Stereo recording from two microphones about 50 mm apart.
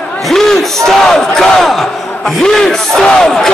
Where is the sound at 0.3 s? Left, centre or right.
Centre.